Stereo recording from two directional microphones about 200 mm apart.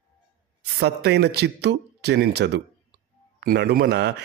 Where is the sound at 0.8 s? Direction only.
55° right (ahead or behind).